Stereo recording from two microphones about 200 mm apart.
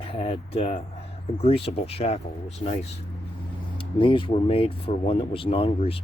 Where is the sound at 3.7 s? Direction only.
25° left (ahead or behind).